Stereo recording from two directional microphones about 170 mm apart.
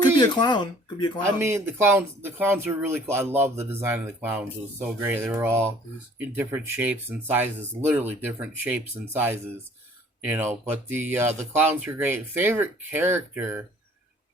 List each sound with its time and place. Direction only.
0.2 s speech: 25° left (ahead or behind)
1.4 s speech: 15° right (ahead or behind)